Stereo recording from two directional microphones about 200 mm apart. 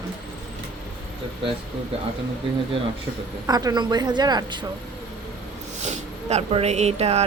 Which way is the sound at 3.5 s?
20° right (ahead or behind).